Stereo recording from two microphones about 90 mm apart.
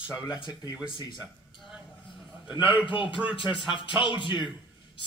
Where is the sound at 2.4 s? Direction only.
65° left (ahead or behind).